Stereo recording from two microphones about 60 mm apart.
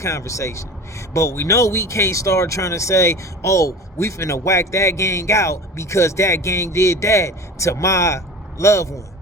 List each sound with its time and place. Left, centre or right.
0.0 s speech: left